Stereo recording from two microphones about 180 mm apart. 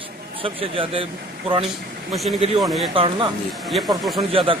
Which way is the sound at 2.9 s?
30° right (ahead or behind).